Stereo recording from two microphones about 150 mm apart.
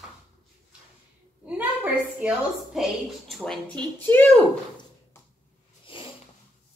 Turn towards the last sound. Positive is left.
turn(degrees=35)  # may be behind; listen again after turning